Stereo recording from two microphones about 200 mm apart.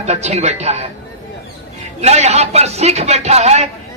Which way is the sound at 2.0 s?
35° right (ahead or behind).